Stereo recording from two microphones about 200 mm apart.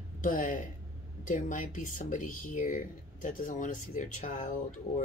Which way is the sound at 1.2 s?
40° left (ahead or behind).